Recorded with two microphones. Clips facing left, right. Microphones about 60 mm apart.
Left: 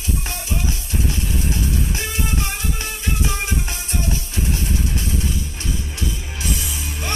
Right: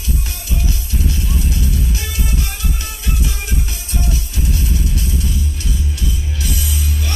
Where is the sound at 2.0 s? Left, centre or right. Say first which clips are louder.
Left 1 dB; left.